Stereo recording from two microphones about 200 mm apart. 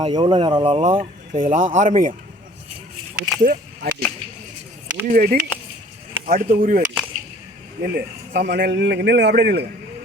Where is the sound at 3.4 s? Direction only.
45° right (ahead or behind).